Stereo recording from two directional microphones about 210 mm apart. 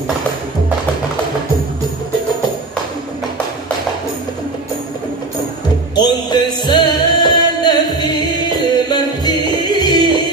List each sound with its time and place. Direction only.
5.9 s music: 20° left (ahead or behind)